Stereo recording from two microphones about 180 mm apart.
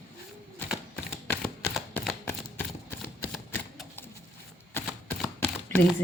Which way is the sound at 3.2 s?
10° left (ahead or behind).